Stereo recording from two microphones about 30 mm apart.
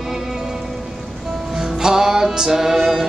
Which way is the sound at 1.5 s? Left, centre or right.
Right.